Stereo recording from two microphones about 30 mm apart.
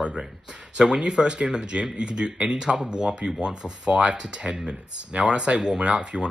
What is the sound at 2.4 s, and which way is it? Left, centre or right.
Speech, centre.